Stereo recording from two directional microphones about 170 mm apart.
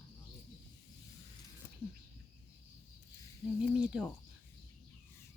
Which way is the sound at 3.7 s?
5° right (ahead or behind).